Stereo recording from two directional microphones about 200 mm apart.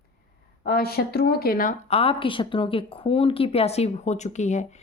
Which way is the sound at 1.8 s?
30° left (ahead or behind).